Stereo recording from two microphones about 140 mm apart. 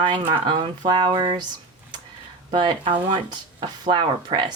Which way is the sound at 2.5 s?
35° right (ahead or behind).